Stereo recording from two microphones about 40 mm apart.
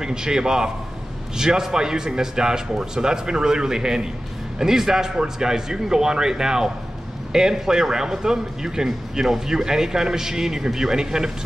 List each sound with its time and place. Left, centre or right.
0.0 s a man's voice: centre